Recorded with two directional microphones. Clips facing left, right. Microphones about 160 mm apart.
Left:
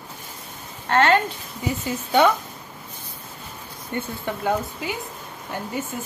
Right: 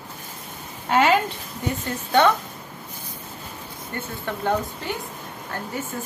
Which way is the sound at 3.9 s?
10° left (ahead or behind).